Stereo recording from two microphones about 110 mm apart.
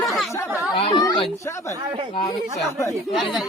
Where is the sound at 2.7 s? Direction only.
25° left (ahead or behind).